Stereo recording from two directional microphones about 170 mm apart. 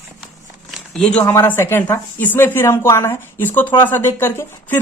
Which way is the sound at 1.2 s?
15° left (ahead or behind).